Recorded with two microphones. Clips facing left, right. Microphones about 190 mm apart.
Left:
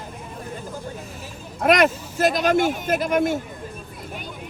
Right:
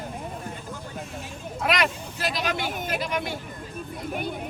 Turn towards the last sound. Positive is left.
turn(degrees=45)  # may be behind; listen again after turning